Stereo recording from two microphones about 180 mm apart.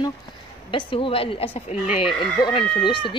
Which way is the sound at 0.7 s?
30° left (ahead or behind).